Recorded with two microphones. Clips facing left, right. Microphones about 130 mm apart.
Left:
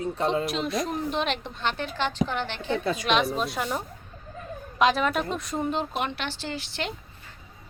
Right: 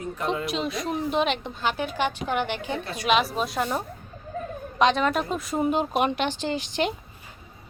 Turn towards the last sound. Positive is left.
turn(degrees=-15)  # may be behind; listen again after turning